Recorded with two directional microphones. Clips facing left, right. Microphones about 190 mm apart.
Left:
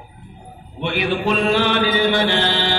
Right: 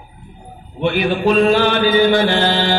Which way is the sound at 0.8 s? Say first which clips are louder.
Right 5 dB; 45° right (ahead or behind).